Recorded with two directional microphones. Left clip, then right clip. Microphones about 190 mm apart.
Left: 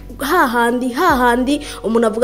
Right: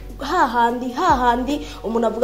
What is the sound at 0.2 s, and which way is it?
A woman's voice, 40° left (ahead or behind).